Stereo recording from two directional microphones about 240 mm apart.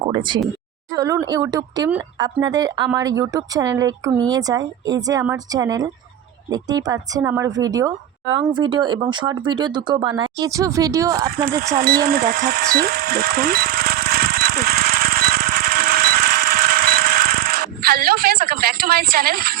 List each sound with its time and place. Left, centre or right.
0.1 s speech: centre
11.3 s speech: right
11.8 s a sound: right